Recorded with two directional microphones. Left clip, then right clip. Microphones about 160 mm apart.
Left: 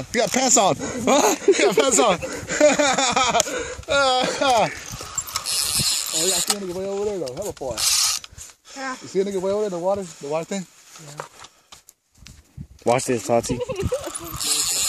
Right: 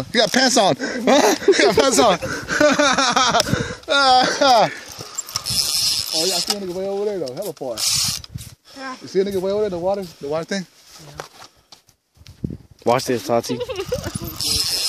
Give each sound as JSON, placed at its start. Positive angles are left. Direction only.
{"t": 0.1, "sound": "speech", "side_deg": -30}
{"t": 5.3, "sound": "mechanisms", "side_deg": -10}
{"t": 6.8, "sound": "speech", "side_deg": -45}
{"t": 7.3, "sound": "speech", "side_deg": -55}
{"t": 7.7, "sound": "mechanisms", "side_deg": 0}
{"t": 9.1, "sound": "speech", "side_deg": -50}
{"t": 12.9, "sound": "speech", "side_deg": 15}
{"t": 13.6, "sound": "a sound", "side_deg": -20}